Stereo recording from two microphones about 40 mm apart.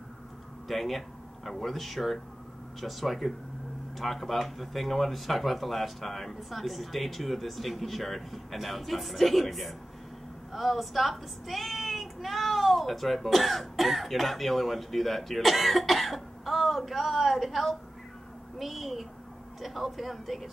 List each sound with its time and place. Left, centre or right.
0.7 s a child's voice: centre